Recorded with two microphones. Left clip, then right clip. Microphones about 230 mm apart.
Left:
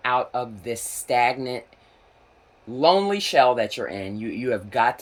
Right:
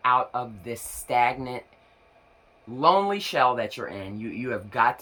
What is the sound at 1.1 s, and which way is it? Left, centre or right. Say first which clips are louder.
Speech: left 2 dB; right.